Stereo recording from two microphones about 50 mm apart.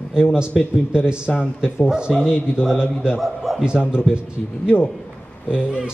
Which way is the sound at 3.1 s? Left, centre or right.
Centre.